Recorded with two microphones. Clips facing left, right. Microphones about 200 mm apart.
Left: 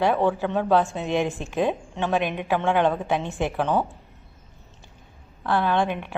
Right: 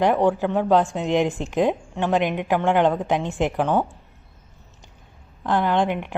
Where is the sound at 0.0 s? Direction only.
15° right (ahead or behind).